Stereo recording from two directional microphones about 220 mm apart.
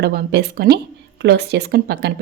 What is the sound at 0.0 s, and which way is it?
Speech, 45° right (ahead or behind).